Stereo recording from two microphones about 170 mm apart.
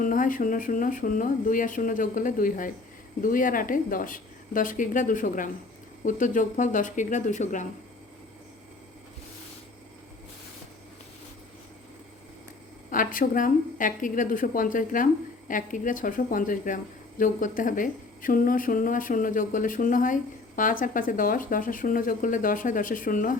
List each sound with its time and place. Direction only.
0.0 s a woman's voice: 50° left (ahead or behind)
12.9 s a woman's voice: 55° left (ahead or behind)